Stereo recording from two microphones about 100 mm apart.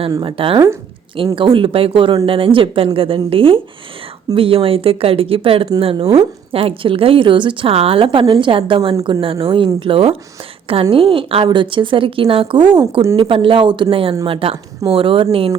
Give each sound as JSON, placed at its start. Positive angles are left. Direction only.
{"t": 0.2, "sound": "a woman's voice", "side_deg": -60}
{"t": 11.4, "sound": "a woman's voice", "side_deg": -55}
{"t": 13.9, "sound": "a woman's voice", "side_deg": -65}